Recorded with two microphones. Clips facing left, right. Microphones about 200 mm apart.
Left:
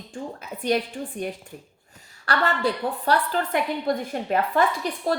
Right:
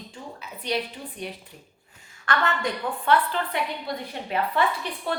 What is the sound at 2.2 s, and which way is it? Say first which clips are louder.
A woman's voice: left 2 dB; 35° left (ahead or behind).